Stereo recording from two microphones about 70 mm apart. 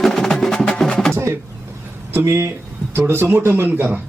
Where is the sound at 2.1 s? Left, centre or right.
Right.